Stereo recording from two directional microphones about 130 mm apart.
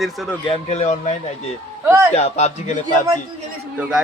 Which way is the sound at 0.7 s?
60° left (ahead or behind).